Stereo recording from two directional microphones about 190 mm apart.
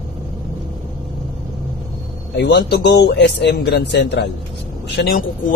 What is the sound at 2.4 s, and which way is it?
Speech, 60° left (ahead or behind).